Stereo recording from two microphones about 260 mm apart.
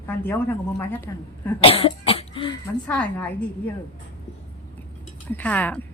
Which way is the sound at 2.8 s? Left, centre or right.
Centre.